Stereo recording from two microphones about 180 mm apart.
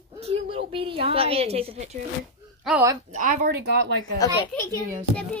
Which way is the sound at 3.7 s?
75° right (ahead or behind).